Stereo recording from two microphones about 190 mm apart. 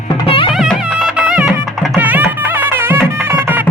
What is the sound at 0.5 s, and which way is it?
Music, centre (ahead or behind).